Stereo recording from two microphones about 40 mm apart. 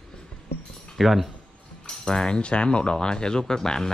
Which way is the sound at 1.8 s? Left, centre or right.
Centre.